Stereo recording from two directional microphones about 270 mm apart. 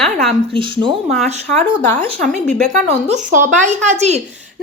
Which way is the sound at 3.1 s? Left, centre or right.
Right.